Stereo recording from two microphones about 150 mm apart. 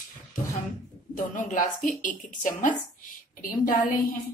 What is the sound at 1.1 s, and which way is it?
A woman's voice, 60° left (ahead or behind).